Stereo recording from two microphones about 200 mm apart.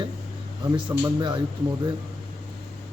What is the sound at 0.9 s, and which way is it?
Speech, 10° right (ahead or behind).